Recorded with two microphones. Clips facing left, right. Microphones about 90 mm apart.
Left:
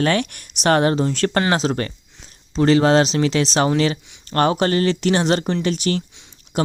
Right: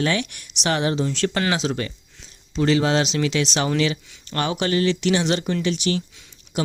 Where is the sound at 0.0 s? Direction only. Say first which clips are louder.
Left 4 dB; 50° left (ahead or behind).